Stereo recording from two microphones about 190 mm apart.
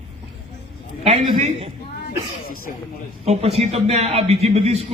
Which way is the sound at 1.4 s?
35° right (ahead or behind).